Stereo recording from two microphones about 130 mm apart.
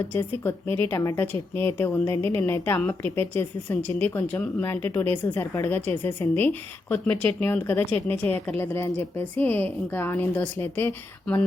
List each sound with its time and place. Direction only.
0.1 s a woman's voice: 15° left (ahead or behind)